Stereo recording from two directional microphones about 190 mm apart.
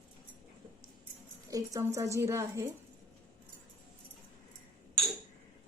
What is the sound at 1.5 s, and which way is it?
A woman's voice, 20° right (ahead or behind).